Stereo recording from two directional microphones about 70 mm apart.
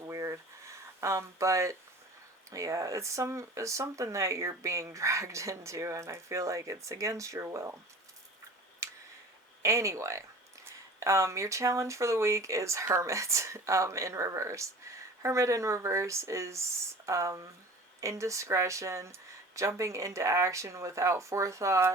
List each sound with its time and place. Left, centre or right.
0.0 s a sound: right
2.5 s speech: right
8.8 s tick: right
9.6 s speech: right